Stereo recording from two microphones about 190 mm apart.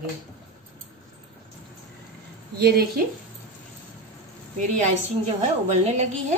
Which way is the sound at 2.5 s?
60° right (ahead or behind).